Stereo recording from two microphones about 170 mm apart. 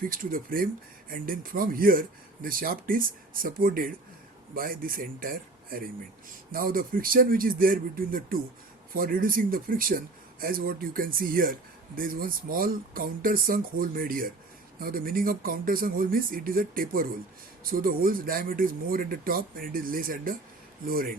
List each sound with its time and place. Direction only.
0.0 s speech: 55° right (ahead or behind)